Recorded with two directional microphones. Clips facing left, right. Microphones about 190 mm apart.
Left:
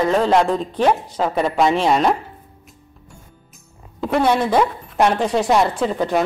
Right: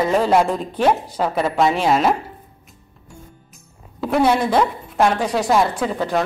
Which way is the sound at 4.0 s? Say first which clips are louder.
Even; 5° right (ahead or behind).